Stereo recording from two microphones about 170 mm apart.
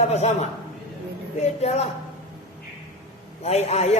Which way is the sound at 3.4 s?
40° left (ahead or behind).